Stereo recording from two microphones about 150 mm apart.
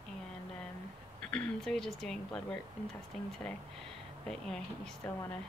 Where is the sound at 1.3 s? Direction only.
5° left (ahead or behind).